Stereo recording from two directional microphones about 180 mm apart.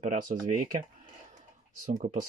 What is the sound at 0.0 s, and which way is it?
Speech, 50° right (ahead or behind).